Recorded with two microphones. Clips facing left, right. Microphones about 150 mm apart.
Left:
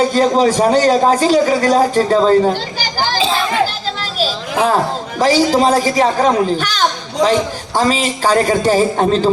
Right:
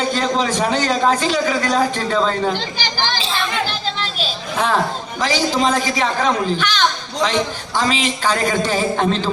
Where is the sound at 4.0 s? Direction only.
40° left (ahead or behind).